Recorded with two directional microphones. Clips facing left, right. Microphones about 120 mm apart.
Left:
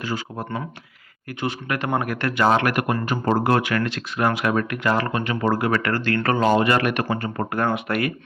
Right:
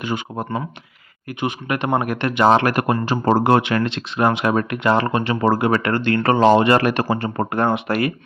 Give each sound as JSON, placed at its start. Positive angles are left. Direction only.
{"t": 0.0, "sound": "a man's voice", "side_deg": -20}